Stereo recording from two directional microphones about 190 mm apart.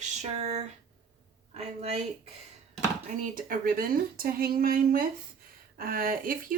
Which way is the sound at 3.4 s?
50° right (ahead or behind).